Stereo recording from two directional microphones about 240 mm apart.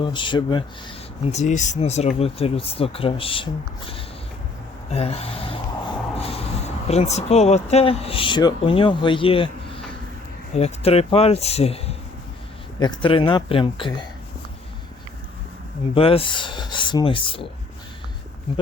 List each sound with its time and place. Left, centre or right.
0.0 s speech: centre
6.1 s a sound: left
6.8 s speech: left
10.5 s speech: left
16.0 s speech: left